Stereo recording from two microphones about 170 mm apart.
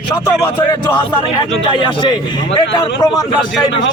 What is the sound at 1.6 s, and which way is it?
A man's voice, 30° left (ahead or behind).